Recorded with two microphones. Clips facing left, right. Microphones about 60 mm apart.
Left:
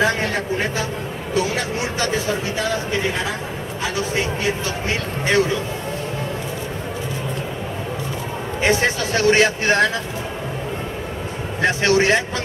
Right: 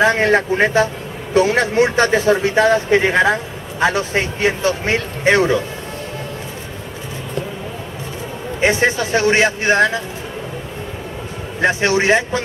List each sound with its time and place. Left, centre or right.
0.0 s speech: right
8.5 s speech: right
11.6 s speech: centre